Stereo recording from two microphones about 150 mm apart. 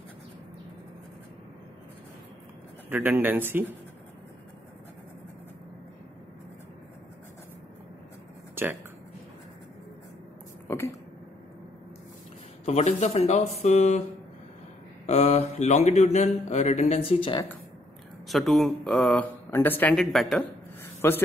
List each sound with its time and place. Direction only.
2.9 s a man's voice: 10° right (ahead or behind)
8.6 s speech: 15° right (ahead or behind)
12.6 s mantra: 45° left (ahead or behind)
15.0 s mantra: 50° left (ahead or behind)
18.3 s speech: centre (ahead or behind)
21.0 s a man's voice: 15° left (ahead or behind)